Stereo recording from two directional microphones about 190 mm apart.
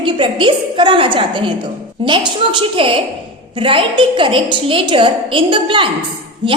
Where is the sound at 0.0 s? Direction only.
25° right (ahead or behind).